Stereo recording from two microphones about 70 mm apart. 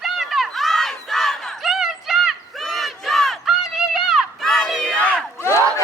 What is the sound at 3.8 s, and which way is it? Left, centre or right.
Crowd, centre.